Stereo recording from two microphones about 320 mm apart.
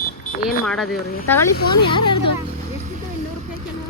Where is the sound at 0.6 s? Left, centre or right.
Centre.